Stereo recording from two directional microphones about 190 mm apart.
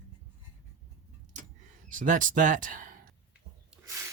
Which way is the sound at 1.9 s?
45° right (ahead or behind).